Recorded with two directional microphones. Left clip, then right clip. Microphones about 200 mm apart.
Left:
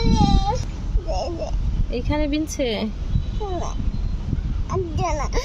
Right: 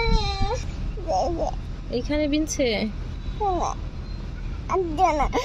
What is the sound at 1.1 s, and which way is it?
Speech, 30° right (ahead or behind).